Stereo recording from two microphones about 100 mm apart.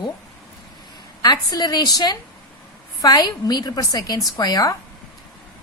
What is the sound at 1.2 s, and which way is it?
A woman's voice, 40° left (ahead or behind).